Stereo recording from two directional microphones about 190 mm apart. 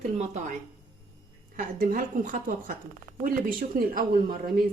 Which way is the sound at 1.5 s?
50° right (ahead or behind).